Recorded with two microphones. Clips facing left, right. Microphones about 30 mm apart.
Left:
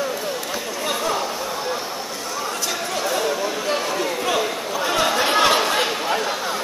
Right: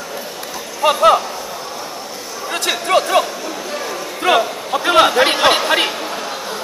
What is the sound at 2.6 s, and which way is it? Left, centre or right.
Speech, right.